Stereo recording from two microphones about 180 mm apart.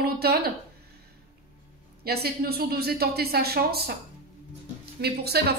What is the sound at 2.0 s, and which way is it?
Speech, 60° right (ahead or behind).